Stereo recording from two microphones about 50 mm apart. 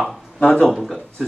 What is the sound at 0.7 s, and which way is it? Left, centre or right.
Speech, centre.